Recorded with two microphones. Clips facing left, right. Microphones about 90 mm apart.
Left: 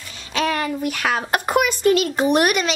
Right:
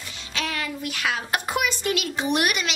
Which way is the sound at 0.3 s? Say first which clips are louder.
Left 8 dB; 45° left (ahead or behind).